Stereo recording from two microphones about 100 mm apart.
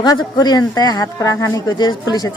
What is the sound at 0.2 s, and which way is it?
A man's voice, 45° left (ahead or behind).